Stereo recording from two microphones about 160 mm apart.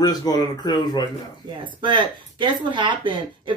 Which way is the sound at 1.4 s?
25° right (ahead or behind).